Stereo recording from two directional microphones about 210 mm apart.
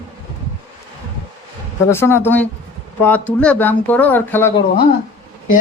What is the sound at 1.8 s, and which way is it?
Speech, 10° left (ahead or behind).